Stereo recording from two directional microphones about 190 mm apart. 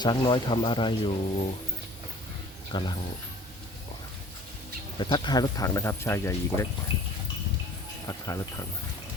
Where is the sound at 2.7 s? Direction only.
25° left (ahead or behind).